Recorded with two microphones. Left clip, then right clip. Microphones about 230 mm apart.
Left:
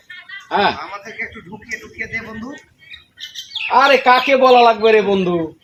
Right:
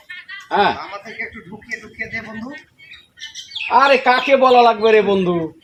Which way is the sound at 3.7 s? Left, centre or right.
Centre.